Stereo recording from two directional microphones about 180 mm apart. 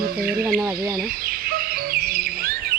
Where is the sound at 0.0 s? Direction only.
55° right (ahead or behind).